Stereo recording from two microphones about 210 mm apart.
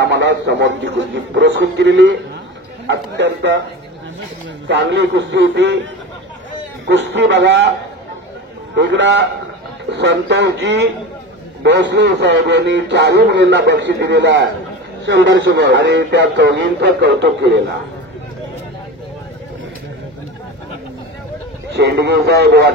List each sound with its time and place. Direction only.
0.0 s speech: 55° right (ahead or behind)
4.6 s speech: 55° right (ahead or behind)
6.9 s speech: 60° right (ahead or behind)
8.7 s speech: 60° right (ahead or behind)
21.7 s speech: 55° right (ahead or behind)